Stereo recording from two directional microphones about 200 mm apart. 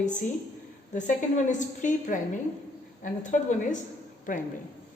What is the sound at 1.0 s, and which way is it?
A woman's voice, 40° left (ahead or behind).